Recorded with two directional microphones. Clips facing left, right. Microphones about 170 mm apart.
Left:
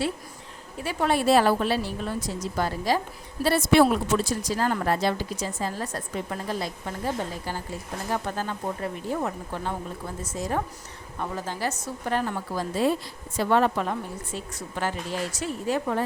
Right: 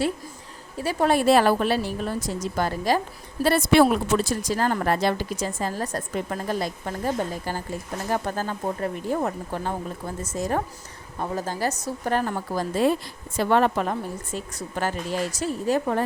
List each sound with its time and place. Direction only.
0.8 s a woman's voice: 40° right (ahead or behind)
1.3 s speech: 65° right (ahead or behind)
3.4 s speech: 65° right (ahead or behind)
13.3 s a woman's voice: 60° right (ahead or behind)
14.3 s a woman's voice: 45° right (ahead or behind)